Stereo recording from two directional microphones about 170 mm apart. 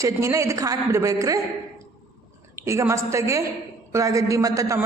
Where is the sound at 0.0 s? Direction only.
15° right (ahead or behind).